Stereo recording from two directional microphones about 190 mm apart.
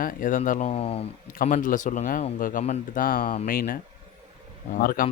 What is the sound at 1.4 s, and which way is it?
Speech, 45° left (ahead or behind).